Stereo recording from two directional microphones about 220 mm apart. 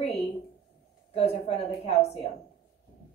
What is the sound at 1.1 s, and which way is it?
A woman's voice, 30° left (ahead or behind).